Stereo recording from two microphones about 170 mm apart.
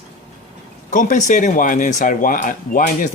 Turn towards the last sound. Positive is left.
turn(degrees=50)  # may be behind; listen again after turning